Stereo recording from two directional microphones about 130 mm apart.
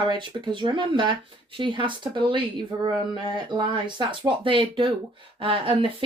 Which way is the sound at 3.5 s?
35° right (ahead or behind).